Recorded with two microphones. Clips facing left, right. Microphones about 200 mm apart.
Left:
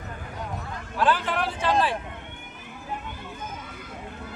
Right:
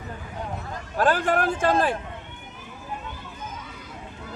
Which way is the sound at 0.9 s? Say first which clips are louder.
Right 3 dB; 45° right (ahead or behind).